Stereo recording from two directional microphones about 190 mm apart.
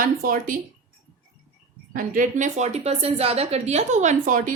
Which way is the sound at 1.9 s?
45° right (ahead or behind).